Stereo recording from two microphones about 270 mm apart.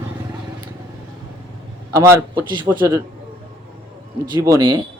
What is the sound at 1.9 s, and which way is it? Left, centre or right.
Speech, centre.